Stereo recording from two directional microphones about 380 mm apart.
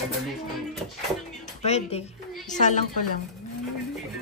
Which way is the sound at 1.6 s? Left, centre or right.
Centre.